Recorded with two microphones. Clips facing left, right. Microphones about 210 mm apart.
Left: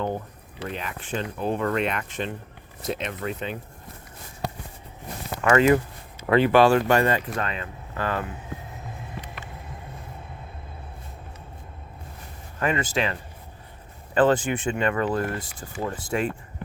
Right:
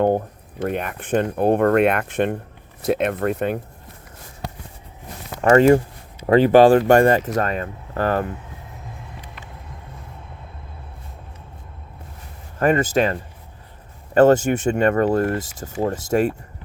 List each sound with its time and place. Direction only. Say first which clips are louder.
0.0 s speech: right 10 dB; 50° right (ahead or behind)
5.4 s speech: right 6 dB; 40° right (ahead or behind)
12.5 s speech: right 7 dB; 45° right (ahead or behind)